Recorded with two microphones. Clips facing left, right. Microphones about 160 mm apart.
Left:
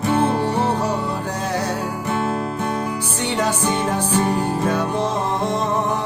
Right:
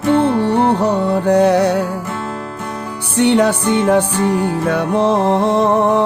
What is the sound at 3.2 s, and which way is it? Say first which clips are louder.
Music: right 10 dB; 65° right (ahead or behind).